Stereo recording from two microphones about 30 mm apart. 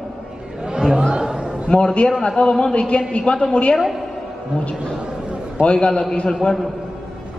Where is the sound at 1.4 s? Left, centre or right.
Right.